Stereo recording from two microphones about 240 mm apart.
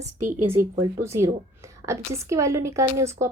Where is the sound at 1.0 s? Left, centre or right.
Centre.